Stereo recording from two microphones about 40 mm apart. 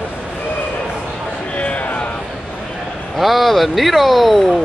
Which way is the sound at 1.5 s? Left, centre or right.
Left.